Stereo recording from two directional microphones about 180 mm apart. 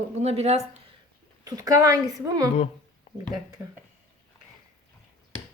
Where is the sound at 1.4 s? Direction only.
20° right (ahead or behind).